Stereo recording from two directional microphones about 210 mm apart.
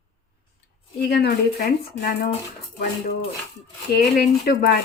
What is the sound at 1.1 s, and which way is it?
Speech, 50° left (ahead or behind).